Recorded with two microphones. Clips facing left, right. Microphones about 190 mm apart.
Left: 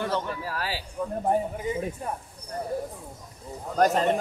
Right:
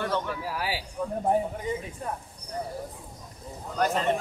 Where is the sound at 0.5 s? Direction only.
10° right (ahead or behind).